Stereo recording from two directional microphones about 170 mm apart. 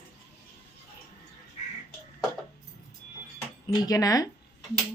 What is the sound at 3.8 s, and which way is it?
Speech, 20° left (ahead or behind).